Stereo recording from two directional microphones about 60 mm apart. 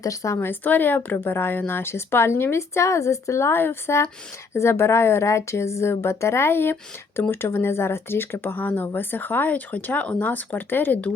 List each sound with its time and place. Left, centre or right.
0.0 s a woman's voice: left
0.3 s a woman's voice: left